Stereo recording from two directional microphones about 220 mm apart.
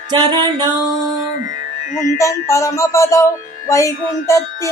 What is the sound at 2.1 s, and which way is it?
Music, 15° left (ahead or behind).